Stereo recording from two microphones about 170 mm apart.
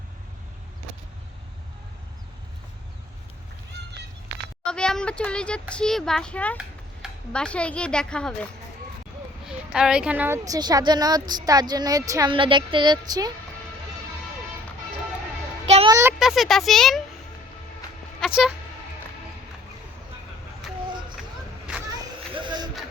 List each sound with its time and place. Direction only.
4.6 s speech: 5° left (ahead or behind)
9.5 s speech: 5° right (ahead or behind); by 12.3 s 20° right (ahead or behind)
12.3 s speech: 30° right (ahead or behind)
15.9 s a sound: 15° right (ahead or behind)
16.1 s speech: centre (ahead or behind)
18.2 s a sound: 5° right (ahead or behind)
22.3 s music: 30° right (ahead or behind)